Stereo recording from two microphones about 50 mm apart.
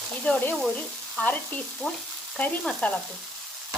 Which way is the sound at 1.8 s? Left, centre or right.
Centre.